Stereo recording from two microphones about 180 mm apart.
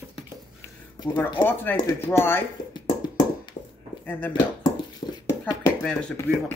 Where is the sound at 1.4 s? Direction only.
10° left (ahead or behind).